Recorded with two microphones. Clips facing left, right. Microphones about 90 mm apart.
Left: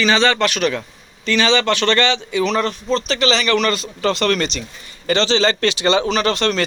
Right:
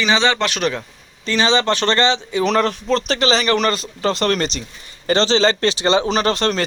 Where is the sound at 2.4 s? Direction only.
55° right (ahead or behind).